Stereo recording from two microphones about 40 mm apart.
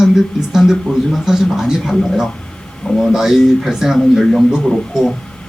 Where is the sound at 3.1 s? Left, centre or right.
Centre.